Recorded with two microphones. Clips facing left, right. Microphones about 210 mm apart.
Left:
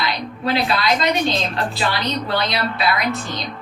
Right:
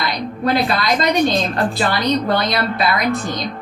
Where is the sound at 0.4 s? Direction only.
45° right (ahead or behind).